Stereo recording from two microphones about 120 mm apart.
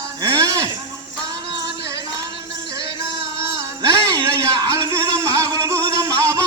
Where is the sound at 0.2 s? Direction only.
30° right (ahead or behind).